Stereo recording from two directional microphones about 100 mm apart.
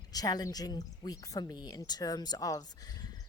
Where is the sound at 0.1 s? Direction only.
40° left (ahead or behind).